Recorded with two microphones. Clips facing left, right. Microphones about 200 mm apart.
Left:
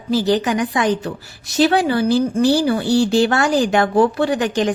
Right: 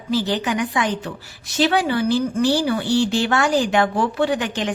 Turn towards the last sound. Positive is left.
turn(degrees=40)  # may be behind; listen again after turning